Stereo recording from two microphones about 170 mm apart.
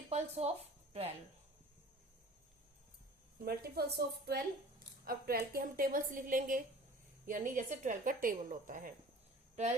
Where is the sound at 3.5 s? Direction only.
65° right (ahead or behind).